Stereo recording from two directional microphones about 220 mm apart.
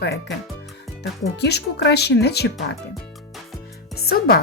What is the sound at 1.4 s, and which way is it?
Speech, 50° left (ahead or behind).